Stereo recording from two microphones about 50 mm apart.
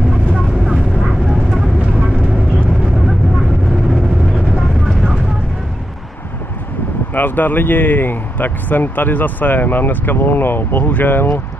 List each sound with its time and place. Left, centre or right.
0.3 s vehicle: centre
4.6 s vehicle: centre
7.2 s speech: left